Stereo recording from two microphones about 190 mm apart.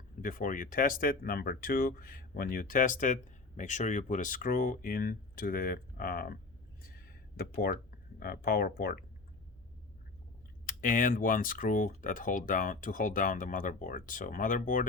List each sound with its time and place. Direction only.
0.2 s speech: 45° left (ahead or behind)
6.9 s a sound: 50° left (ahead or behind)
10.7 s speech: 45° left (ahead or behind)